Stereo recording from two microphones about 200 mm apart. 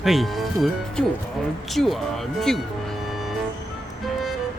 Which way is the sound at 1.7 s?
Centre (ahead or behind).